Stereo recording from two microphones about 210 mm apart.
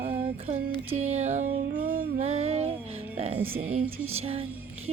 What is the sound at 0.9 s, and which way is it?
Music, 30° right (ahead or behind).